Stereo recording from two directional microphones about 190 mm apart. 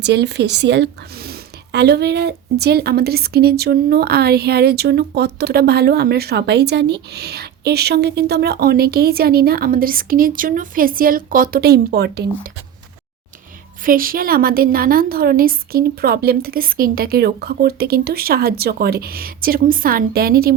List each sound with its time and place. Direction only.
0.0 s speech: 60° right (ahead or behind)
13.8 s a woman's voice: 50° right (ahead or behind)